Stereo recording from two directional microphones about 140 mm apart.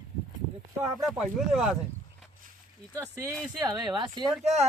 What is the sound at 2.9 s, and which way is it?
Speech, 20° right (ahead or behind).